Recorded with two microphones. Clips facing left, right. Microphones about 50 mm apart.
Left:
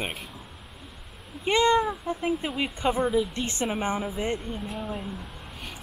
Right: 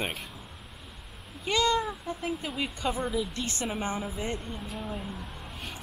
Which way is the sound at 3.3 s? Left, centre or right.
Left.